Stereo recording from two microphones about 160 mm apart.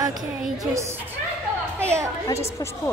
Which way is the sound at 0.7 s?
15° right (ahead or behind).